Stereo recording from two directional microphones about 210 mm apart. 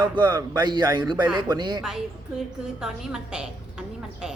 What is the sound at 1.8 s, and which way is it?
A woman's voice, centre (ahead or behind).